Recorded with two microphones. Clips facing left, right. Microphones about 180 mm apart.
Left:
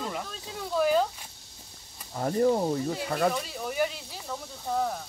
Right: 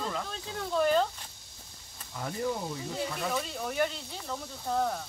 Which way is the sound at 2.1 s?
45° left (ahead or behind).